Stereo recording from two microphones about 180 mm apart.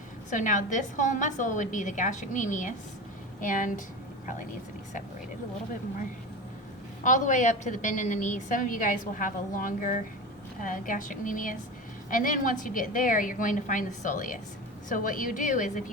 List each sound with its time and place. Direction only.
0.3 s a woman's voice: 45° left (ahead or behind)
7.0 s a woman's voice: 45° left (ahead or behind)